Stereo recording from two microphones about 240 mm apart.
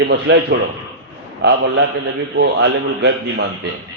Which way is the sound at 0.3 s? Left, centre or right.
Right.